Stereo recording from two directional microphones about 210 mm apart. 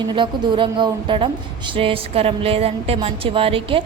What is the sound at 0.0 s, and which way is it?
A woman's voice, 20° right (ahead or behind).